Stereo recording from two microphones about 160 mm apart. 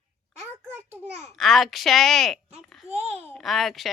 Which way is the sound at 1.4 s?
Centre (ahead or behind).